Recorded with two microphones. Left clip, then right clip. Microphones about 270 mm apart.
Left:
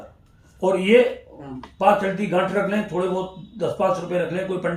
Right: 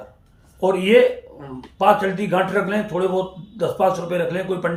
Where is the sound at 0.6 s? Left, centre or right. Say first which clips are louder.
Right 2 dB; centre.